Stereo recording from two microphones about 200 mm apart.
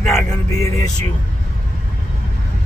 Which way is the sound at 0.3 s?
15° left (ahead or behind).